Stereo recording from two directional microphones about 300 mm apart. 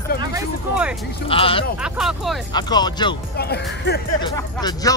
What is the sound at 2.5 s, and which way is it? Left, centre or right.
Speech, centre.